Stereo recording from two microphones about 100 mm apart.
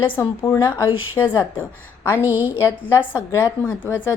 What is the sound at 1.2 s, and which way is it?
Speech, 20° left (ahead or behind).